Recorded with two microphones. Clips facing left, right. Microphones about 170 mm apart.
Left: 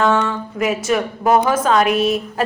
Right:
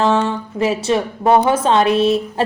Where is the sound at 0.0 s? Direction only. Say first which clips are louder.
Right 1 dB; 30° right (ahead or behind).